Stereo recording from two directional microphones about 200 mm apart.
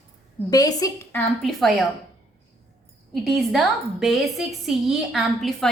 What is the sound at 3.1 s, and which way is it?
A woman's voice, centre (ahead or behind).